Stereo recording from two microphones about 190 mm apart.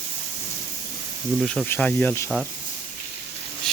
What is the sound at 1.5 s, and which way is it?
Speech, 5° left (ahead or behind).